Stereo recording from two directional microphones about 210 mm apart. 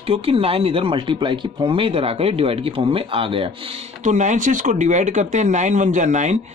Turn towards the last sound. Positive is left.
turn(degrees=-35)  # may be behind; listen again after turning